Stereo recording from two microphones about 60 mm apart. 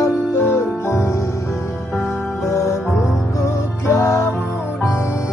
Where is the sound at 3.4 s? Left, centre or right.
Left.